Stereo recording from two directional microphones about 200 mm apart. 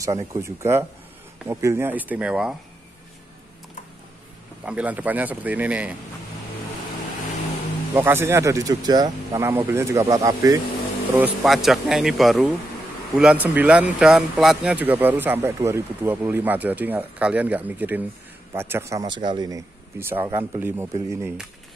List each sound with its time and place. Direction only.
0.0 s speech: 15° right (ahead or behind)
4.6 s speech: 5° right (ahead or behind)
7.9 s speech: 10° right (ahead or behind)
11.1 s speech: centre (ahead or behind)